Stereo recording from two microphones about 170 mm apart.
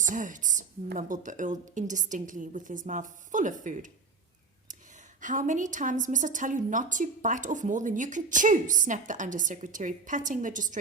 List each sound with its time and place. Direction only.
0.0 s a woman's voice: 50° right (ahead or behind)
5.2 s a woman's voice: 50° right (ahead or behind)